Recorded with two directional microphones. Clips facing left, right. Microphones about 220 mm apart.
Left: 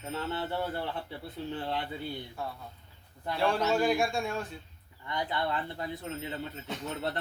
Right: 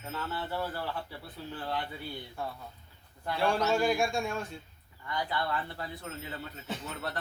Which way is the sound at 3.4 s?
Centre (ahead or behind).